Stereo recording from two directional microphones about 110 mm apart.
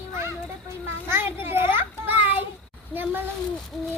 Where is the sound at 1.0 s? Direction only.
20° right (ahead or behind).